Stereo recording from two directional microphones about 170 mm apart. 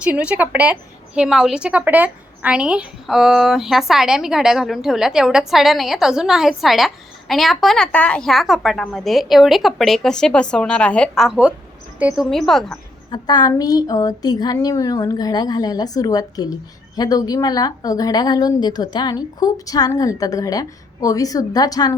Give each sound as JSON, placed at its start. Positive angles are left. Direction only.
{"t": 0.0, "sound": "a woman's voice", "side_deg": -5}
{"t": 13.1, "sound": "a woman's voice", "side_deg": 25}